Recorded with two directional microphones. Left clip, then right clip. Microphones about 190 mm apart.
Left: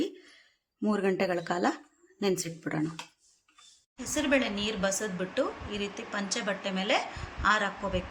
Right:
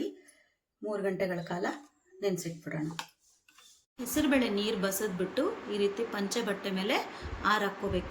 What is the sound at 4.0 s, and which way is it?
Speech, centre (ahead or behind).